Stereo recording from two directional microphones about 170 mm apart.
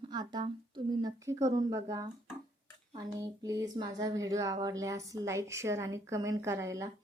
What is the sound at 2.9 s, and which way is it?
Speech, 20° right (ahead or behind).